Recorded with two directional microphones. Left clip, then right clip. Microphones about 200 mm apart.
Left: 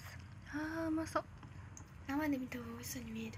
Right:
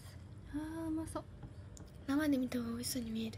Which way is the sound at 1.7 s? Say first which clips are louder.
Right 3 dB; 45° right (ahead or behind).